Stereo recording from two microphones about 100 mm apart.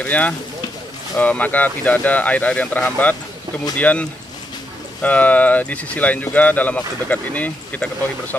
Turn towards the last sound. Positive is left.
turn(degrees=15)  # may be behind; listen again after turning